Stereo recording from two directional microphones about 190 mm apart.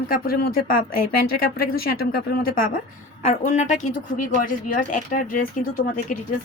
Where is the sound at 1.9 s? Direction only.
50° left (ahead or behind).